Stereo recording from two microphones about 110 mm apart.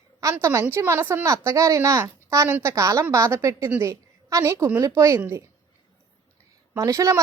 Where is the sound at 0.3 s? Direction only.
25° right (ahead or behind).